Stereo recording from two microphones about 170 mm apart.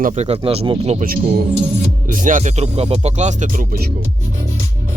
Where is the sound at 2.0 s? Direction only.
50° right (ahead or behind).